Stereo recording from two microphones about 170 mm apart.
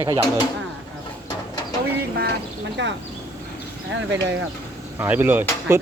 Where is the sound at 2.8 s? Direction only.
90° right.